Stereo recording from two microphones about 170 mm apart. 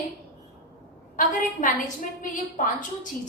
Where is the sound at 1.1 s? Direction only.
50° left (ahead or behind).